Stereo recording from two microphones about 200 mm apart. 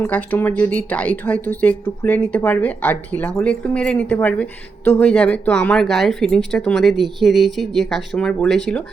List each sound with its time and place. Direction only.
0.0 s a woman's voice: 10° left (ahead or behind)